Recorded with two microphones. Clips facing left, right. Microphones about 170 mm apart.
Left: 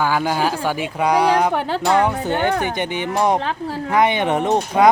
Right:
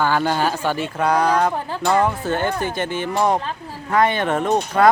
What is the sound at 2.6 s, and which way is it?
Speech, 20° left (ahead or behind).